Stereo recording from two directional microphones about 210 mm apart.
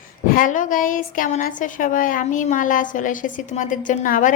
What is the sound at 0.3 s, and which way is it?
A woman's voice, 40° left (ahead or behind).